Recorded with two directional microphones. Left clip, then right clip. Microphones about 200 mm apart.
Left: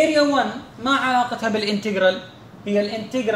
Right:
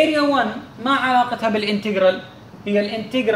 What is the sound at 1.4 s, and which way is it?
Speech, 20° left (ahead or behind).